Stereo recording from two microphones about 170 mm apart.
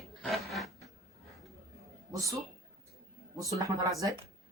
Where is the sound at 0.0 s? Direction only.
Centre (ahead or behind).